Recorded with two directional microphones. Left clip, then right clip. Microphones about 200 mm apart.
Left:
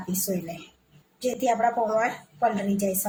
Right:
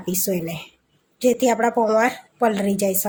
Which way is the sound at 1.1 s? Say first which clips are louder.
Right 6 dB; 50° right (ahead or behind).